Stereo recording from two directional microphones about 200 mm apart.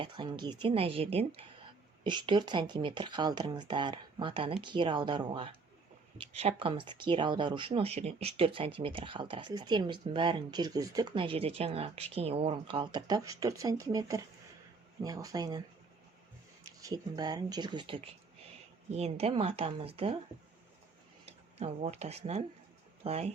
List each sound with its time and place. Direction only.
0.0 s speech: 25° right (ahead or behind)
16.8 s speech: 20° right (ahead or behind)
21.2 s speech: 30° right (ahead or behind)